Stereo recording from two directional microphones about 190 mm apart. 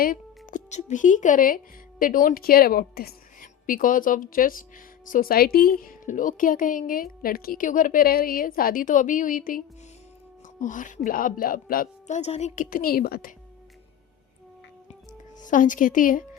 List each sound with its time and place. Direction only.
0.0 s a woman's voice: 45° left (ahead or behind)
15.4 s a woman's voice: 45° left (ahead or behind)